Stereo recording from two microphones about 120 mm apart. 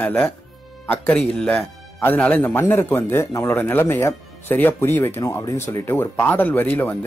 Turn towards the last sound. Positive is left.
turn(degrees=15)  # may be behind; listen again after turning